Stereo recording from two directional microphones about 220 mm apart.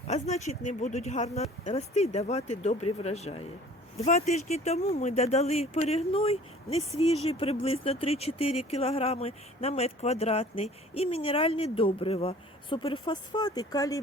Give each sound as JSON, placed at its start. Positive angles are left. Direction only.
{"t": 0.1, "sound": "speech", "side_deg": 30}